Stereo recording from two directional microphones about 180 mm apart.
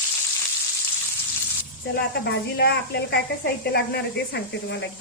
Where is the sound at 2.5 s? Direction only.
70° left (ahead or behind).